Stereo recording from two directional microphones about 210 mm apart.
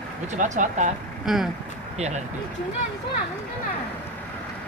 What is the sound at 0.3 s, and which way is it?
Speech, 35° right (ahead or behind).